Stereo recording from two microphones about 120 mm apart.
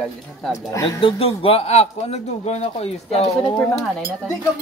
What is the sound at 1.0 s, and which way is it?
A man's voice, 50° left (ahead or behind).